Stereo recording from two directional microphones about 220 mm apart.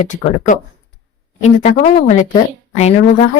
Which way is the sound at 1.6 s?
30° left (ahead or behind).